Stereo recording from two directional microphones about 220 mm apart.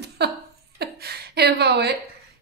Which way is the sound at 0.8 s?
45° right (ahead or behind).